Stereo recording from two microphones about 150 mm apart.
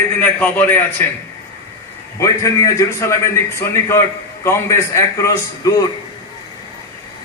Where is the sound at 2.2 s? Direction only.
20° left (ahead or behind).